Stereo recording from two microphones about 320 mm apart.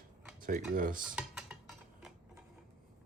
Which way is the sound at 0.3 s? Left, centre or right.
Right.